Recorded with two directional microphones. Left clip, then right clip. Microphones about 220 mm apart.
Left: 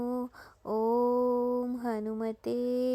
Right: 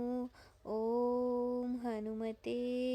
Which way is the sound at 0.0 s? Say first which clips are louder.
Left 5 dB; 5° left (ahead or behind).